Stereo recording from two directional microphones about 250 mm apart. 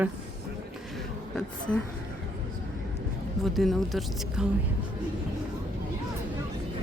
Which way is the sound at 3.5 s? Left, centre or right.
Centre.